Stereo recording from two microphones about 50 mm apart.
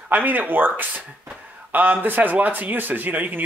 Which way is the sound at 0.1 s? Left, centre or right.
Right.